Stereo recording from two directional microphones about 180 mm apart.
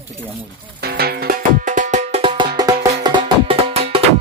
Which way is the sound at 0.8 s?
60° right (ahead or behind).